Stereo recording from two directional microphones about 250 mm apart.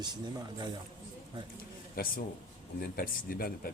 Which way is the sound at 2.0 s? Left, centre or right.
Left.